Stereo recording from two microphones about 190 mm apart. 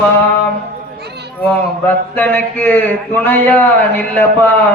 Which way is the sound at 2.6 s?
10° left (ahead or behind).